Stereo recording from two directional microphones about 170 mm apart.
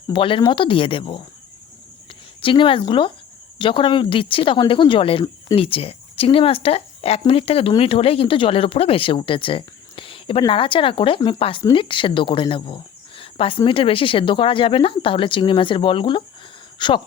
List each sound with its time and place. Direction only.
0.1 s speech: 30° left (ahead or behind)
2.4 s speech: 30° left (ahead or behind)